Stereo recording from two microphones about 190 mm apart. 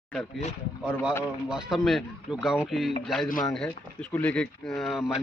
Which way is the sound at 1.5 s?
5° right (ahead or behind).